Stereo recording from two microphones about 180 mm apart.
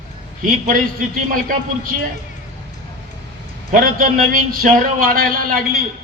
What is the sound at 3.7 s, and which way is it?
A man's voice, 50° right (ahead or behind).